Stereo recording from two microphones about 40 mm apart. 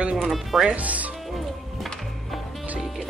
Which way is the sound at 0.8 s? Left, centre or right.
Right.